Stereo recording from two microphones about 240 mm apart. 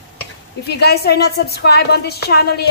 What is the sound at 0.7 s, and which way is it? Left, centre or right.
A woman's voice, left.